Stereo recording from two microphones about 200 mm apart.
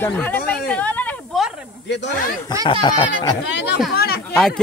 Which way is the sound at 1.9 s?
60° left (ahead or behind).